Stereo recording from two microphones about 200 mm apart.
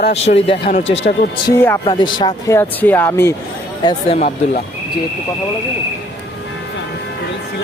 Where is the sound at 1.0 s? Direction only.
50° left (ahead or behind).